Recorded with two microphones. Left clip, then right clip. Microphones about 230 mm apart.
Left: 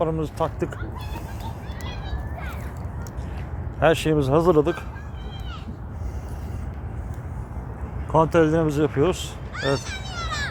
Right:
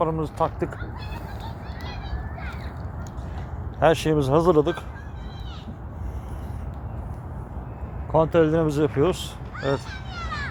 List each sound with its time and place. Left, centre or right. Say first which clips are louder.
0.0 s speech: right 1 dB; centre
3.8 s speech: even; centre
8.1 s speech: left 1 dB; centre
10.2 s a sound: left 3 dB; left